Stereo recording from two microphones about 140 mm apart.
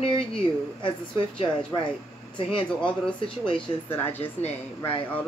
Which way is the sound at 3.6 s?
15° left (ahead or behind).